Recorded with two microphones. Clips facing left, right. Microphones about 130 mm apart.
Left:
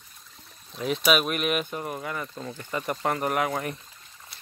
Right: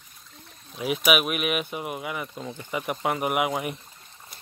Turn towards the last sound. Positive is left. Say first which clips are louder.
# right 1 dB
turn(degrees=-10)  # may be behind; listen again after turning